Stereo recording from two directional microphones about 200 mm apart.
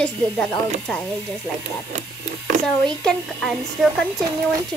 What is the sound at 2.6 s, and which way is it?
Speech, 5° left (ahead or behind).